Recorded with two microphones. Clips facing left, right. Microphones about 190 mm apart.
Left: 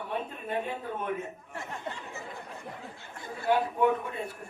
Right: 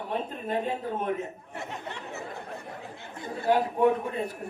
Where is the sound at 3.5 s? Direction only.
40° right (ahead or behind).